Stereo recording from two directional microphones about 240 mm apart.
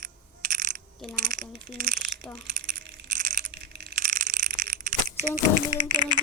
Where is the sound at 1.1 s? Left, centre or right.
Right.